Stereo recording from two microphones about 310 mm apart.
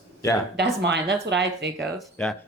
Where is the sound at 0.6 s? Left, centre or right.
Right.